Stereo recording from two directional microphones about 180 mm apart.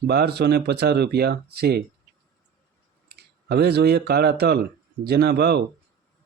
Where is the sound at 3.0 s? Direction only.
65° right (ahead or behind).